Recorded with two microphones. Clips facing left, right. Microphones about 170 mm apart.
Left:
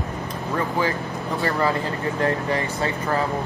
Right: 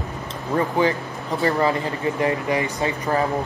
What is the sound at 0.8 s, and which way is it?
Speech, 20° right (ahead or behind).